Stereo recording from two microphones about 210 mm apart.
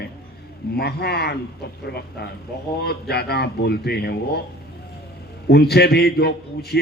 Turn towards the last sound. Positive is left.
turn(degrees=50)  # may be behind; listen again after turning